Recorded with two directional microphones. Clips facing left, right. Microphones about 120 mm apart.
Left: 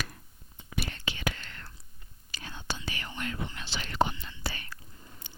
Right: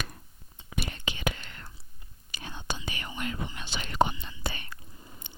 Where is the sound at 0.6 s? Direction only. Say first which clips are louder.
Even; 25° right (ahead or behind).